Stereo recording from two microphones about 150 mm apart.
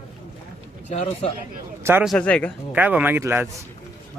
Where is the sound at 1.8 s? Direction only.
15° right (ahead or behind).